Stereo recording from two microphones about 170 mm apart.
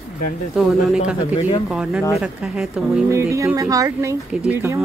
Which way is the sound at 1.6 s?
5° right (ahead or behind).